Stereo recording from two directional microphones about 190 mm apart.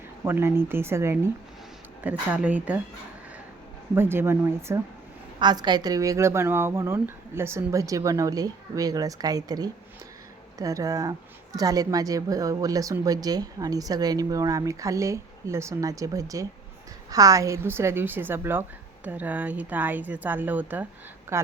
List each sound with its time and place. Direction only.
0.3 s speech: 15° right (ahead or behind)
3.9 s speech: 10° right (ahead or behind)
5.4 s a woman's voice: 25° right (ahead or behind)